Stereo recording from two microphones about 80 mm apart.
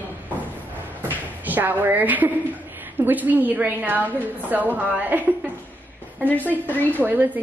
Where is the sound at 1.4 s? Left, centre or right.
Right.